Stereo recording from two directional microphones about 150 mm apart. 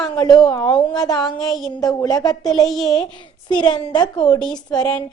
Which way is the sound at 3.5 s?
30° left (ahead or behind).